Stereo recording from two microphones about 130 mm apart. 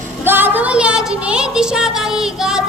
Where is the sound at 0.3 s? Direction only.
15° right (ahead or behind).